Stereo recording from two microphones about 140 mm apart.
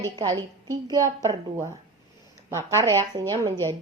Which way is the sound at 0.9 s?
25° right (ahead or behind).